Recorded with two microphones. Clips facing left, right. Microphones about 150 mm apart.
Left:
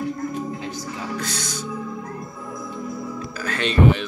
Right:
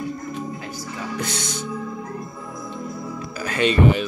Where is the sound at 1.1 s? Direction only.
20° right (ahead or behind).